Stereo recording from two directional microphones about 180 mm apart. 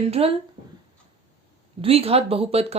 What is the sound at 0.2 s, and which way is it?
Speech, 30° right (ahead or behind).